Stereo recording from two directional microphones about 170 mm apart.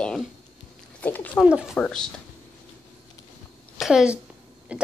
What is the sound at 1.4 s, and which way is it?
Speech, 5° right (ahead or behind).